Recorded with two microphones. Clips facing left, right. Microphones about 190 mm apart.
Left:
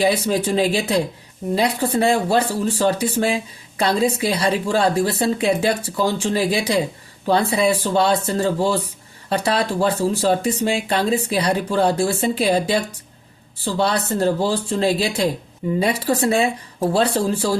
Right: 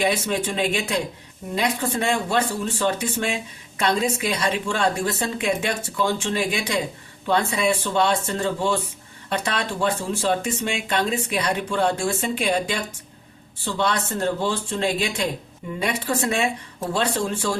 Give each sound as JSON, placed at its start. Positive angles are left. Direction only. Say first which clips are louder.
{"t": 0.0, "sound": "speech", "louder": "left 4 dB", "side_deg": 35}